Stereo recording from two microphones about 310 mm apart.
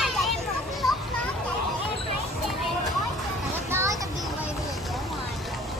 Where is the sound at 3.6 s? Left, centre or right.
Centre.